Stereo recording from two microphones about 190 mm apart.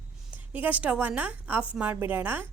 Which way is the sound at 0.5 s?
10° right (ahead or behind).